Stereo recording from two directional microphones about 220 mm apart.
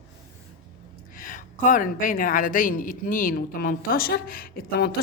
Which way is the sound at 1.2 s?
35° left (ahead or behind).